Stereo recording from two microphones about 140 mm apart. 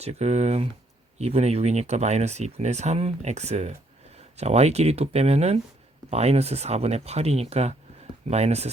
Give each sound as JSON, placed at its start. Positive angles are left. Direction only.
{"t": 0.0, "sound": "speech", "side_deg": -50}